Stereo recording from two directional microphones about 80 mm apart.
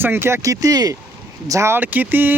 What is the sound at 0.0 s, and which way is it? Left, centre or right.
Speech, right.